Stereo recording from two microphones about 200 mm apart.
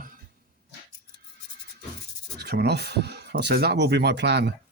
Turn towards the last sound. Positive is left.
turn(degrees=-60)  # may be behind; listen again after turning